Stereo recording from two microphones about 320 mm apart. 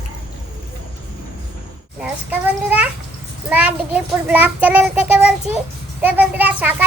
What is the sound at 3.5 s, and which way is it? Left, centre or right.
A child's voice, centre.